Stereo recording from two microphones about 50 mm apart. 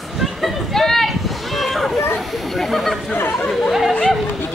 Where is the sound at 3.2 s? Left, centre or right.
Left.